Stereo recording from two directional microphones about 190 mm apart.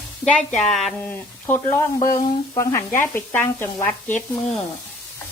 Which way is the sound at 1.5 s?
15° left (ahead or behind).